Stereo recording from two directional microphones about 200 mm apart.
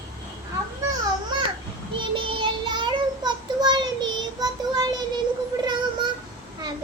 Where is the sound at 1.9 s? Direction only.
25° right (ahead or behind).